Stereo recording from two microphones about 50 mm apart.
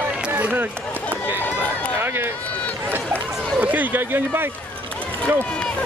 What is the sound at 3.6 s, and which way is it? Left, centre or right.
Speech, right.